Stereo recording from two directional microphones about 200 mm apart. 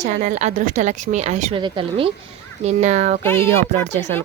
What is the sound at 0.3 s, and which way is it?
Speech, 35° right (ahead or behind).